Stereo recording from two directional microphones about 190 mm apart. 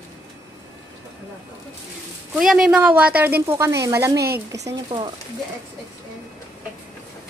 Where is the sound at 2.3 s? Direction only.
Centre (ahead or behind); by 5.1 s 20° right (ahead or behind).